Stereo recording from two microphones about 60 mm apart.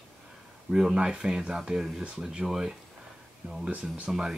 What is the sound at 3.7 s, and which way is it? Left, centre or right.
Speech, right.